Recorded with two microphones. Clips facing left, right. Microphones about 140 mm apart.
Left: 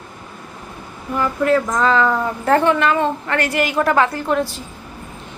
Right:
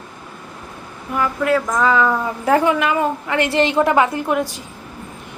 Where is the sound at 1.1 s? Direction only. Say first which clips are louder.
Left 1 dB; centre (ahead or behind).